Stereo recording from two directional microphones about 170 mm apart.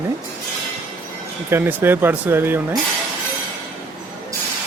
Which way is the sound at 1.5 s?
15° right (ahead or behind).